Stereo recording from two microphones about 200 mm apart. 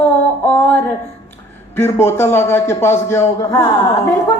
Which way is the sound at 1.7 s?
10° left (ahead or behind).